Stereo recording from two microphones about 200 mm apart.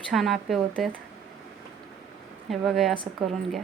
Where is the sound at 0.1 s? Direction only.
Centre (ahead or behind).